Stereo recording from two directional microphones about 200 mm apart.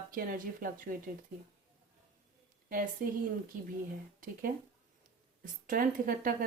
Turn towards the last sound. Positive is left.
turn(degrees=-45)  # may be behind; listen again after turning